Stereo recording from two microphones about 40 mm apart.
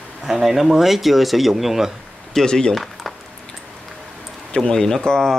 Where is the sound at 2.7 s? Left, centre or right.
Centre.